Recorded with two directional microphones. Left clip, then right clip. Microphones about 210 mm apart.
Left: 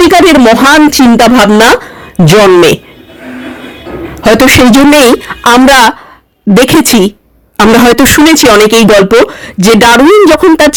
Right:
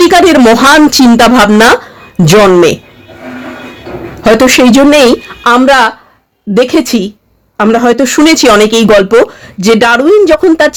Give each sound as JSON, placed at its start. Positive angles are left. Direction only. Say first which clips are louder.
{"t": 0.0, "sound": "speech", "louder": "left 1 dB", "side_deg": 10}
{"t": 4.2, "sound": "speech", "louder": "left 1 dB", "side_deg": 20}
{"t": 8.2, "sound": "speech", "louder": "right 1 dB", "side_deg": 25}